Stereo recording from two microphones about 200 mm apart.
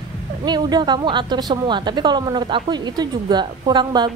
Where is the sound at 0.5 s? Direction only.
20° right (ahead or behind).